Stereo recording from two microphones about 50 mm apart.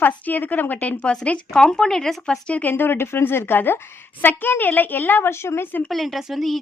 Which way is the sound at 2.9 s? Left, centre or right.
Left.